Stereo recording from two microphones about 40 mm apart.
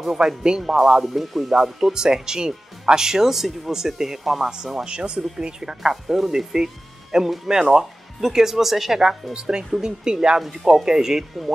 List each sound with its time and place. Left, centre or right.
0.0 s speech: centre
0.7 s speech: centre
4.8 s speech: right
10.4 s speech: centre